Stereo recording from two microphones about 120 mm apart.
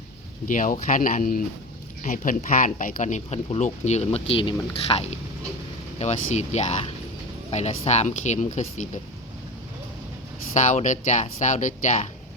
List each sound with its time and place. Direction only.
0.4 s speech: 90° left
10.5 s speech: 90° left